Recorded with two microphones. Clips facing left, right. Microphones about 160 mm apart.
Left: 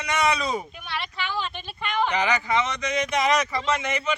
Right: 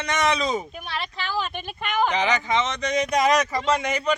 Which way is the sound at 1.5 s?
55° right (ahead or behind).